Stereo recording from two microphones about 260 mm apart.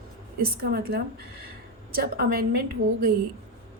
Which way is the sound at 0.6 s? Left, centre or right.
Right.